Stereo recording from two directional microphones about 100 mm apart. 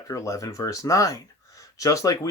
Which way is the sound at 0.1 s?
35° left (ahead or behind).